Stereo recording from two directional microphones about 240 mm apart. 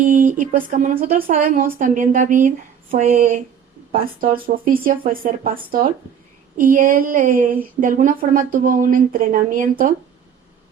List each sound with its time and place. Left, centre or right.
0.0 s speech: right